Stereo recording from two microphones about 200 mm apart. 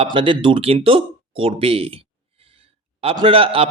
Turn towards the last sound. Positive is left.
turn(degrees=-25)  # may be behind; listen again after turning